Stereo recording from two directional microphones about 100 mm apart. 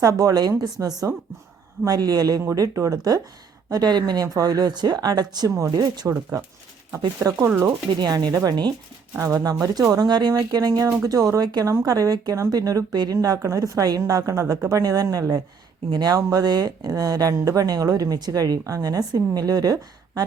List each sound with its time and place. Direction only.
0.0 s speech: 35° right (ahead or behind)
7.3 s speech: 30° right (ahead or behind)
7.9 s speech: 45° right (ahead or behind)